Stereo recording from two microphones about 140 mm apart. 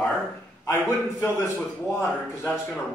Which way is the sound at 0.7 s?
15° left (ahead or behind).